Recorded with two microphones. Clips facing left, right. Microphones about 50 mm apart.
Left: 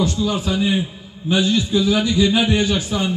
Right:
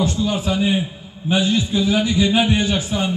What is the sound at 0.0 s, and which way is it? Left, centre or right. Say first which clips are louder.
A man's voice: even; right.